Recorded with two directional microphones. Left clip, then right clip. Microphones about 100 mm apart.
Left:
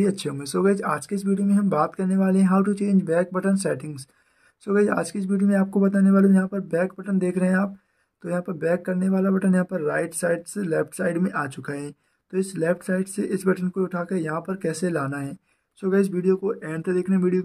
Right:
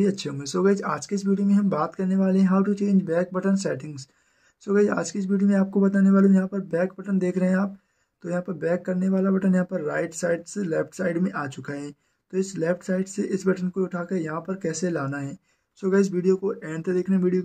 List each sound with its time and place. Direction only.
0.0 s speech: 40° left (ahead or behind)
15.8 s speech: 20° left (ahead or behind)